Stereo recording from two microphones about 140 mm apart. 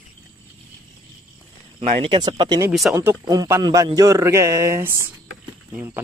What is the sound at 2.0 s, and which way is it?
A man's voice, 35° right (ahead or behind).